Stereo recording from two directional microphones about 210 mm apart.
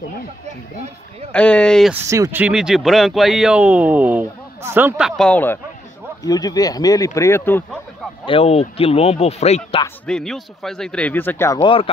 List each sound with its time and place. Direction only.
1.3 s speech: 5° left (ahead or behind)
2.0 s speech: 15° right (ahead or behind); by 7.8 s 10° left (ahead or behind)
8.3 s speech: 30° left (ahead or behind)
10.0 s speech: centre (ahead or behind); by 11.9 s 25° left (ahead or behind)